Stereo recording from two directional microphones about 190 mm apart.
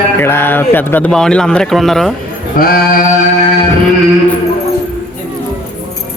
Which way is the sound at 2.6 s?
50° left (ahead or behind).